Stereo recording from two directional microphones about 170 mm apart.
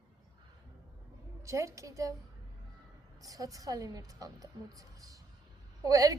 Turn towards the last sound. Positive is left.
turn(degrees=-20)  # may be behind; listen again after turning